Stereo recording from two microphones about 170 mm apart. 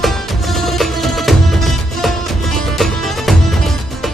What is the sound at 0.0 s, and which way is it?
Music, centre (ahead or behind).